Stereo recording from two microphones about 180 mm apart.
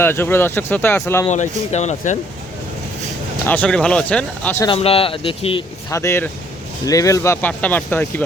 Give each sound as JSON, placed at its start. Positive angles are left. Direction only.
{"t": 0.0, "sound": "speech", "side_deg": 10}
{"t": 1.3, "sound": "speech", "side_deg": 40}
{"t": 3.4, "sound": "speech", "side_deg": 10}
{"t": 4.6, "sound": "speech", "side_deg": 30}
{"t": 5.9, "sound": "speech", "side_deg": 15}